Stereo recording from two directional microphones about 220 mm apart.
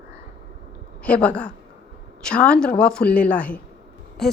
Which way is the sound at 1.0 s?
5° left (ahead or behind).